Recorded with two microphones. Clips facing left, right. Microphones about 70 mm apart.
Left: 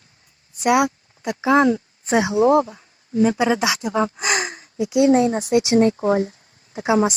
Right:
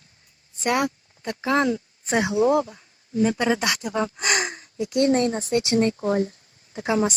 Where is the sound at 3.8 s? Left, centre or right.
Left.